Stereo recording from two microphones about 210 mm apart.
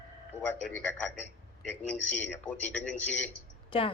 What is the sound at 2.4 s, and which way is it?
Speech, 10° left (ahead or behind).